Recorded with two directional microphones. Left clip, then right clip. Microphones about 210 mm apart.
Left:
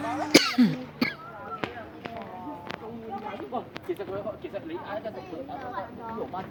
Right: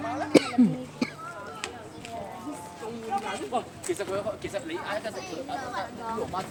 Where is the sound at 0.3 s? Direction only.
Centre (ahead or behind).